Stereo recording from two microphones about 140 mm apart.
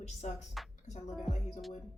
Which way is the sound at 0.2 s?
55° left (ahead or behind).